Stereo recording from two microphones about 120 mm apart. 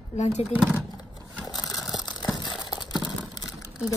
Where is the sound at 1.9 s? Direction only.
35° left (ahead or behind).